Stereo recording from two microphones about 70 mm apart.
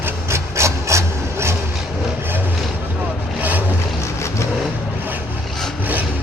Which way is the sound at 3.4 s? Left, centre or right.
Right.